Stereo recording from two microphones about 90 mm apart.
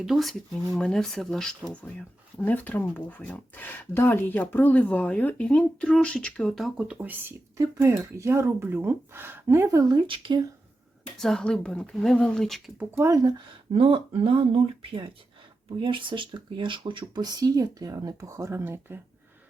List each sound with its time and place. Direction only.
0.0 s speech: centre (ahead or behind)
6.7 s speech: 15° right (ahead or behind)
7.5 s speech: 30° right (ahead or behind)
10.1 s speech: 65° right (ahead or behind)
11.2 s speech: 5° left (ahead or behind)
12.9 s speech: 30° right (ahead or behind)
13.7 s speech: 85° right
15.8 s speech: 65° right (ahead or behind); by 18.9 s 25° right (ahead or behind)